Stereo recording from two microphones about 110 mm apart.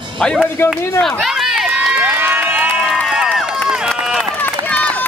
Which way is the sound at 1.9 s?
15° right (ahead or behind).